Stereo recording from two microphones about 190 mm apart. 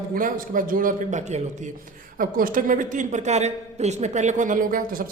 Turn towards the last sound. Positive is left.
turn(degrees=-45)  # may be behind; listen again after turning